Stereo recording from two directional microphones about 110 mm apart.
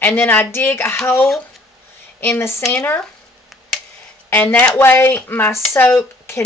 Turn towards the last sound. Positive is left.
turn(degrees=20)  # may be behind; listen again after turning